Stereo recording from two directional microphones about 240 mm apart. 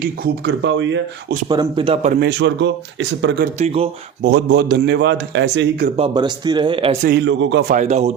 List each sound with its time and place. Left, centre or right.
0.0 s a man's voice: right
1.5 s speech: centre
2.1 s a man's voice: right
3.6 s speech: right
4.3 s a man's voice: right
6.0 s speech: centre
7.0 s a man's voice: right
7.7 s speech: right